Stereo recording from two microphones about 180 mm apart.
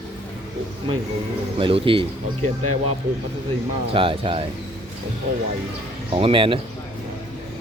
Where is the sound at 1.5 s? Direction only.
30° right (ahead or behind).